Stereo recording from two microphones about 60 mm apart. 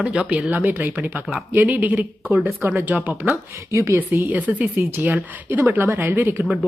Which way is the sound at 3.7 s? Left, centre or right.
Right.